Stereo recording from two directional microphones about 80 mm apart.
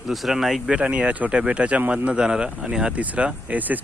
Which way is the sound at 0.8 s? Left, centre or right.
Centre.